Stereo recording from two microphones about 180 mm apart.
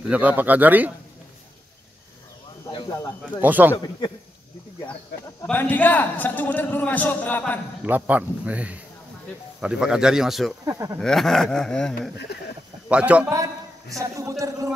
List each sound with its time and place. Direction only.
0.1 s a man's voice: 10° right (ahead or behind)
3.3 s a man's voice: 10° right (ahead or behind)
3.7 s a man's voice: 20° left (ahead or behind)
5.5 s a man's voice: 10° left (ahead or behind)
7.8 s a man's voice: 10° right (ahead or behind)
10.6 s a man's voice: 20° right (ahead or behind)
11.0 s speech: centre (ahead or behind)
12.3 s speech: 65° left (ahead or behind)
12.8 s speech: 5° right (ahead or behind)
13.9 s a man's voice: 15° right (ahead or behind)